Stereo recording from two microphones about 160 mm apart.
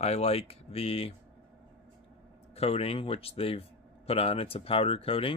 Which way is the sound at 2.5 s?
40° left (ahead or behind).